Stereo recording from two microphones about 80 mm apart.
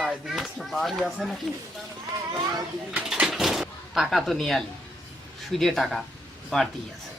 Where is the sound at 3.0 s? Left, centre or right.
Centre.